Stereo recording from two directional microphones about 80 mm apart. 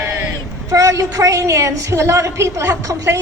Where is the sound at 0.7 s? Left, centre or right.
Right.